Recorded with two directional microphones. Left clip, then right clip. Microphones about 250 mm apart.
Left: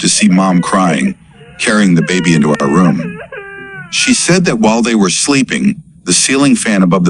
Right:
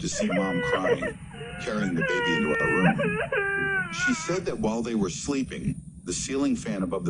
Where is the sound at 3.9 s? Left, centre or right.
Left.